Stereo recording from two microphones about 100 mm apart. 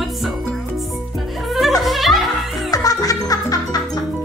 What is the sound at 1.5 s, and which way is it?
Music, centre (ahead or behind).